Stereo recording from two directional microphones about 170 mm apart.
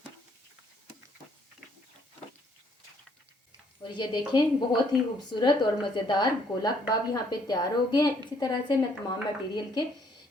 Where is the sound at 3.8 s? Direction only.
25° left (ahead or behind).